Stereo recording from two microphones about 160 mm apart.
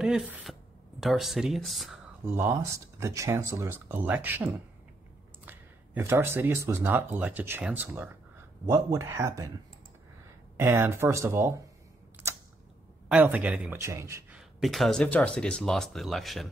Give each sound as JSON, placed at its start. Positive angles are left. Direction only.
{"t": 0.0, "sound": "speech", "side_deg": -5}
{"t": 2.2, "sound": "speech", "side_deg": -15}
{"t": 10.6, "sound": "speech", "side_deg": -15}
{"t": 12.2, "sound": "camera", "side_deg": -10}
{"t": 13.1, "sound": "speech", "side_deg": -10}
{"t": 14.3, "sound": "speech", "side_deg": 0}